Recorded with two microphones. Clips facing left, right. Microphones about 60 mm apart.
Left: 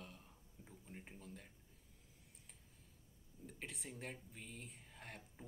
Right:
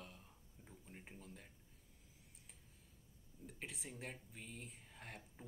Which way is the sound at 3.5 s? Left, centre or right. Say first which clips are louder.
Even; centre.